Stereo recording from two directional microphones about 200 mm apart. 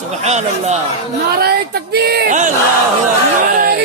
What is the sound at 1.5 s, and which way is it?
Speech, 50° right (ahead or behind).